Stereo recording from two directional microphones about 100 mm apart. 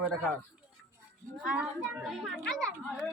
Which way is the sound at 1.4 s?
10° right (ahead or behind).